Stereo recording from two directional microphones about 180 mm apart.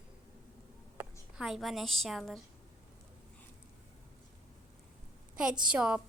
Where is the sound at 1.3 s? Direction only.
Centre (ahead or behind).